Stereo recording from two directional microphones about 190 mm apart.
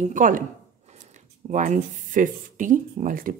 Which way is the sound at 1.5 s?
40° right (ahead or behind).